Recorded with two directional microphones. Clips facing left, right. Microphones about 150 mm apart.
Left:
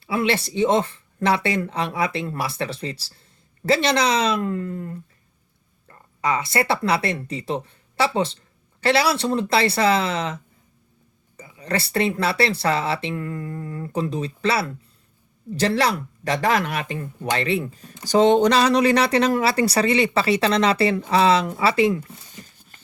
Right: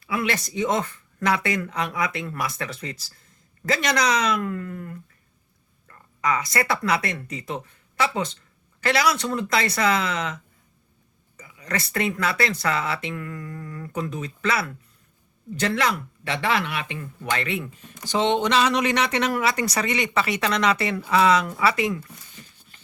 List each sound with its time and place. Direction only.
0.0 s speech: 30° left (ahead or behind)
22.4 s dog: 40° left (ahead or behind)
22.7 s a sound: 45° left (ahead or behind)